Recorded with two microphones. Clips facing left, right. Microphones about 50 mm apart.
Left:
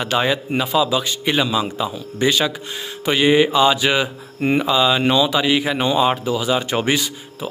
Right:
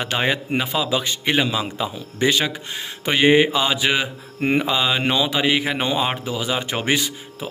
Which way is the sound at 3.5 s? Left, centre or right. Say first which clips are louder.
Left 4 dB; centre.